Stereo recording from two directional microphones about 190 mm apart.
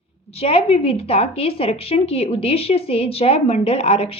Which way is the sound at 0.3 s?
30° left (ahead or behind).